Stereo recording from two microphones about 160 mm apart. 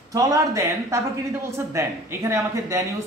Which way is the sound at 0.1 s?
20° right (ahead or behind).